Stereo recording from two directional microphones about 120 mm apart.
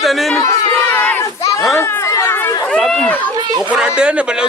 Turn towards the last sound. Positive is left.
turn(degrees=-10)  # may be behind; listen again after turning